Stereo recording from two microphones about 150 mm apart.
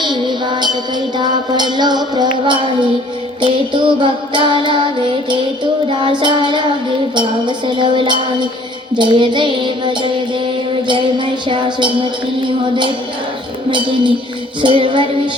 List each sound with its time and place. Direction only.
0.0 s music: 30° right (ahead or behind)
3.4 s music: 35° right (ahead or behind)
11.4 s music: 30° right (ahead or behind)
13.7 s music: 30° right (ahead or behind)